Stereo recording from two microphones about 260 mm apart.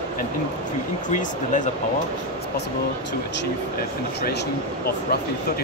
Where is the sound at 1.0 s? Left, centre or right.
Left.